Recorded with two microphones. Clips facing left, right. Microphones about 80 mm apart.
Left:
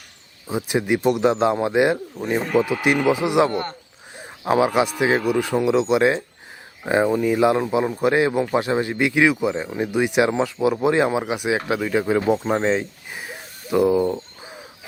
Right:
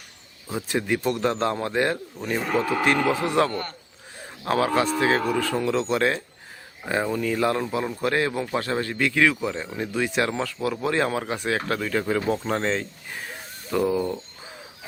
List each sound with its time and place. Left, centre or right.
0.4 s speech: centre